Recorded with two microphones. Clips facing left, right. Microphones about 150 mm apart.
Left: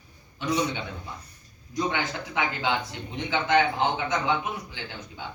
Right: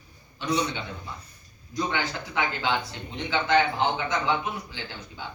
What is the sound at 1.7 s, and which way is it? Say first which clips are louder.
A man's voice: left 1 dB; 15° left (ahead or behind).